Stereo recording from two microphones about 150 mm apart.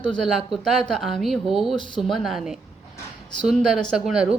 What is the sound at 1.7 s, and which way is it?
Speech, 30° left (ahead or behind).